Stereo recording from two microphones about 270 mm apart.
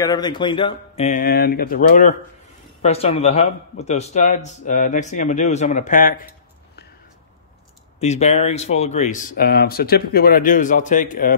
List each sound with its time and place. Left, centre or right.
0.0 s a man's voice: centre
8.0 s a man's voice: left